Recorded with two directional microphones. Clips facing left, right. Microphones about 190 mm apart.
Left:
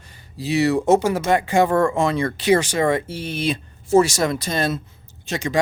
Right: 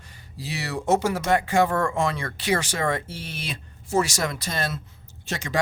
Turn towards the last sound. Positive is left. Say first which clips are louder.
# left 5 dB
turn(degrees=20)  # may be behind; listen again after turning